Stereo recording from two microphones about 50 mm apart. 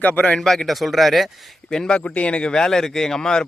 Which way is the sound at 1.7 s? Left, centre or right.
Centre.